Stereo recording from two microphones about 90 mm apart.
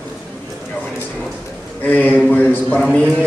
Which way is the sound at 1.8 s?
20° left (ahead or behind).